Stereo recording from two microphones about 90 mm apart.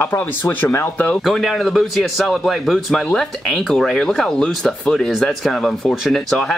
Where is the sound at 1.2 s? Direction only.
5° left (ahead or behind).